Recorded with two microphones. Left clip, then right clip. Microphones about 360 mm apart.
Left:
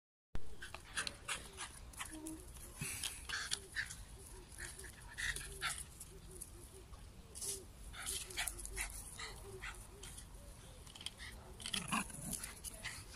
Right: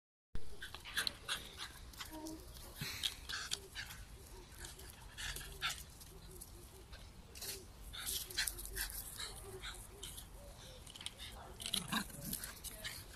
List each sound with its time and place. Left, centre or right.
0.6 s dog: centre
5.1 s dog: centre
7.3 s a sound: right
7.9 s dog: centre